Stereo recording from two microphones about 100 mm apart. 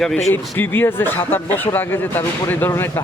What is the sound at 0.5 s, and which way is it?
Speech, 20° left (ahead or behind).